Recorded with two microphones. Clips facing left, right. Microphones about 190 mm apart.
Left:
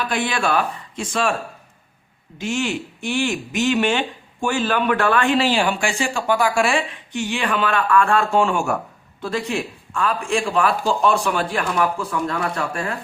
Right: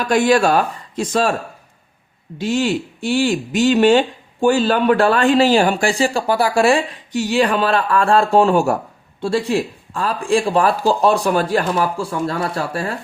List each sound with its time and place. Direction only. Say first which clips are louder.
0.0 s speech: right 8 dB; 45° right (ahead or behind)
2.4 s speech: right 5 dB; 35° right (ahead or behind)